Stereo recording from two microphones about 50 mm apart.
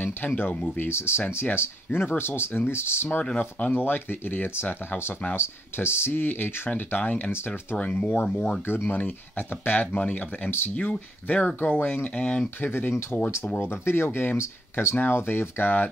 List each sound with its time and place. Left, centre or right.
0.0 s speech: left
0.7 s speech: left
3.3 s speech: left
3.8 s speech: left
8.6 s speech: left
8.9 s speech: left
12.5 s speech: left
13.1 s speech: left
13.6 s speech: left
15.0 s speech: left